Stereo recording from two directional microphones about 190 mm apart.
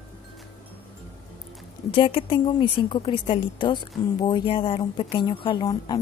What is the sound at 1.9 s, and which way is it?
Speech, 25° left (ahead or behind).